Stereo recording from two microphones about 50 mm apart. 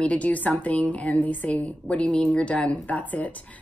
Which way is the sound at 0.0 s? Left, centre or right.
Left.